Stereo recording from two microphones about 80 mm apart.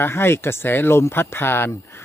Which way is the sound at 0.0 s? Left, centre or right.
Left.